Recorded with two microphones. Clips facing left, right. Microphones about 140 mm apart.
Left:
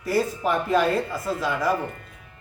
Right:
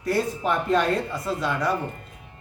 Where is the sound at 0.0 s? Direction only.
Centre (ahead or behind).